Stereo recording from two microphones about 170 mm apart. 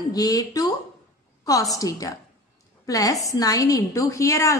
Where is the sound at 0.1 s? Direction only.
20° left (ahead or behind).